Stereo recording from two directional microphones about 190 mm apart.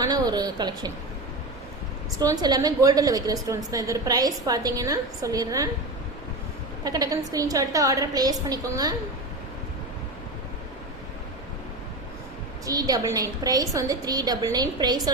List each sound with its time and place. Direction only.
0.0 s a sound: 20° right (ahead or behind)
2.1 s a woman's voice: 20° right (ahead or behind)
6.8 s a woman's voice: 20° right (ahead or behind)
12.6 s a woman's voice: 20° right (ahead or behind)